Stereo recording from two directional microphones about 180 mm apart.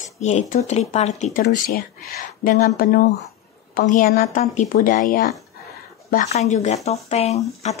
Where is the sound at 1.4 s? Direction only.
55° left (ahead or behind).